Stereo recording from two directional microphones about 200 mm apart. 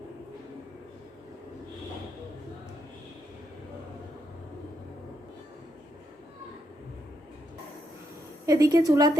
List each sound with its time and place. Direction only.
8.4 s a woman's voice: 20° right (ahead or behind)